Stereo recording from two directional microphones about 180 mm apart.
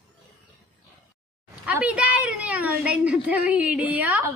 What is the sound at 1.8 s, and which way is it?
A woman's voice, 5° right (ahead or behind).